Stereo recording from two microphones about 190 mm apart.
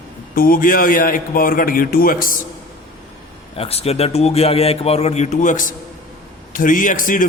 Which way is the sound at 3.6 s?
30° left (ahead or behind).